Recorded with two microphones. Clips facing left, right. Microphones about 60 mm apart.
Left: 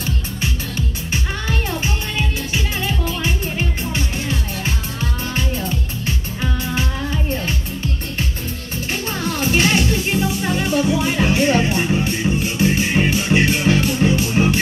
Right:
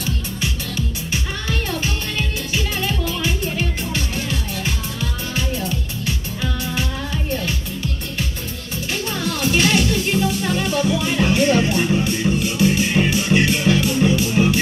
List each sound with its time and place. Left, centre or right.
1.8 s music: left
9.1 s music: left